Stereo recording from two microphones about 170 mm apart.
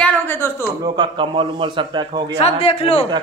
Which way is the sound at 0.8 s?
25° right (ahead or behind).